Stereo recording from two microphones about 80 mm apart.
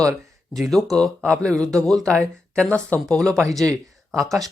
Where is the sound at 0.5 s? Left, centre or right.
Centre.